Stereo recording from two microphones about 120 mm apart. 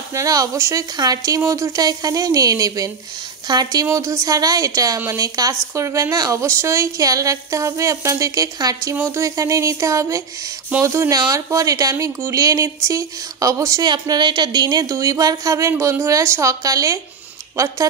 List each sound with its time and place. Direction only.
0.1 s speech: 30° right (ahead or behind)